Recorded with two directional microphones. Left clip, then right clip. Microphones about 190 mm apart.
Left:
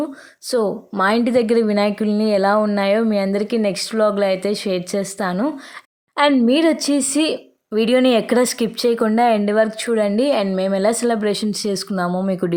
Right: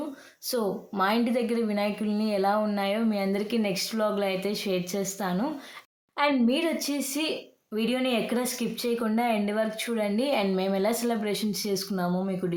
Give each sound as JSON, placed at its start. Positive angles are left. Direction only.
{"t": 0.5, "sound": "a woman's voice", "side_deg": 35}